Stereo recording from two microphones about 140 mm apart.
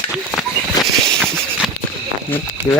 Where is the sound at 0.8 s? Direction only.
30° left (ahead or behind).